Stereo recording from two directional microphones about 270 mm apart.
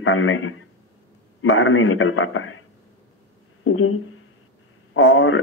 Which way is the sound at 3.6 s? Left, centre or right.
Left.